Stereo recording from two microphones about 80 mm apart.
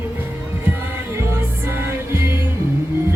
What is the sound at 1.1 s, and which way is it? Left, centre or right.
Music, right.